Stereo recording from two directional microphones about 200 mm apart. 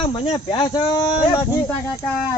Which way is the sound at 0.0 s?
25° left (ahead or behind).